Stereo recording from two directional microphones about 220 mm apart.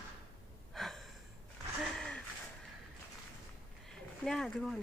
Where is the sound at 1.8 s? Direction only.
5° left (ahead or behind).